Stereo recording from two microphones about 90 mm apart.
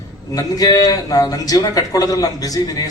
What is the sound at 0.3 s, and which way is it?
A man's voice, 45° left (ahead or behind).